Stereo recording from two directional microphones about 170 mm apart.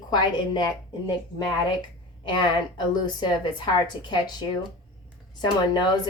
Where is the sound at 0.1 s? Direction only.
25° left (ahead or behind).